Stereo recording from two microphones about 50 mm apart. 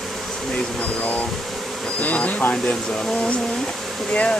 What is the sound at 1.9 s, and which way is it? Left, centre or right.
Speech, left.